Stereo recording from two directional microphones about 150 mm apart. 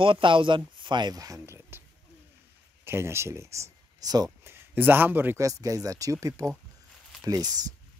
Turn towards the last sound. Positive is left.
turn(degrees=-25)  # may be behind; listen again after turning